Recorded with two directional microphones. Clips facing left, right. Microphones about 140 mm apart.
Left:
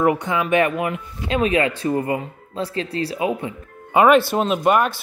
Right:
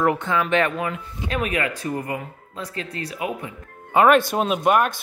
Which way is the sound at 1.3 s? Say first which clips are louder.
Left 6 dB; 25° left (ahead or behind).